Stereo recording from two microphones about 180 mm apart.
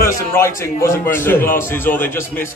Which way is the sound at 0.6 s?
15° left (ahead or behind).